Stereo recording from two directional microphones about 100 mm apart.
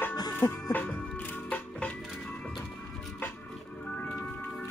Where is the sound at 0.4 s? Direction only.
45° left (ahead or behind).